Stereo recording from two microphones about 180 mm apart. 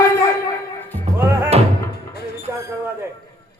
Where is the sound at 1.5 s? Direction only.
35° right (ahead or behind).